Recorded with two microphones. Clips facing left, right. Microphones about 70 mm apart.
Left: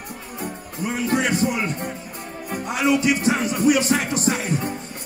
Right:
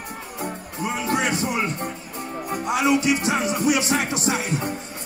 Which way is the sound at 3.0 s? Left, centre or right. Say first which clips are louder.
Left 1 dB; left.